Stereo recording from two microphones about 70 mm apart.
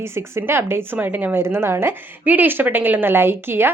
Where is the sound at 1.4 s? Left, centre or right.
Right.